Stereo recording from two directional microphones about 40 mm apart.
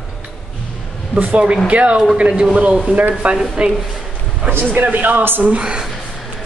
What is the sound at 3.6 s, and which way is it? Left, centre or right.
Speech, right.